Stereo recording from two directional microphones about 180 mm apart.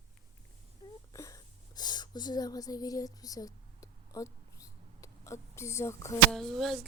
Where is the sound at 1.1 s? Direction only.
20° left (ahead or behind).